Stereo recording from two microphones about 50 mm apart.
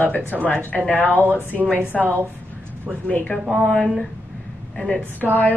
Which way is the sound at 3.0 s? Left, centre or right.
Left.